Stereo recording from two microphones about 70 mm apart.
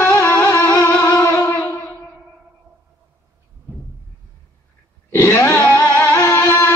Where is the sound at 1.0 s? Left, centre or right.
Left.